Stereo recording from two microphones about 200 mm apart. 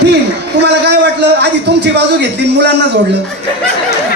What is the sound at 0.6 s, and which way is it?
A man's voice, 55° right (ahead or behind).